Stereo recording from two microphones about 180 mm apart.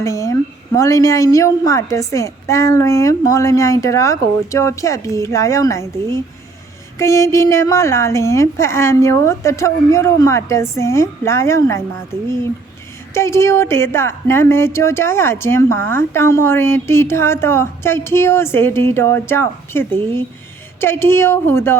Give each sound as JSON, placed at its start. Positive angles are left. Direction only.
{"t": 0.0, "sound": "a woman's voice", "side_deg": 15}
{"t": 7.0, "sound": "a woman's voice", "side_deg": 15}
{"t": 13.1, "sound": "a woman's voice", "side_deg": 15}